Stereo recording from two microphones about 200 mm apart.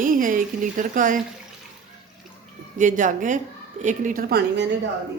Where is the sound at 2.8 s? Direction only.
40° right (ahead or behind).